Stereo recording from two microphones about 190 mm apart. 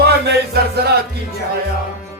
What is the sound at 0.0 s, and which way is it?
Music, 60° right (ahead or behind).